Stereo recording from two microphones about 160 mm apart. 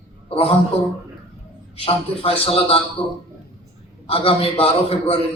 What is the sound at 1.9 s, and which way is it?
Speech, 35° left (ahead or behind).